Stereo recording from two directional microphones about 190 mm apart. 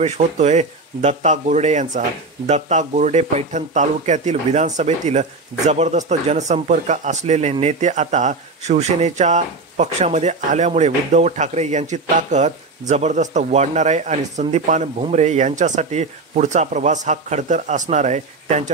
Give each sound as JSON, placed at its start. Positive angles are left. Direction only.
{"t": 0.0, "sound": "speech", "side_deg": -35}